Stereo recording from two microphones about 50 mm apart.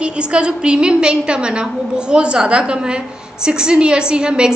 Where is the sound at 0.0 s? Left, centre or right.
Right.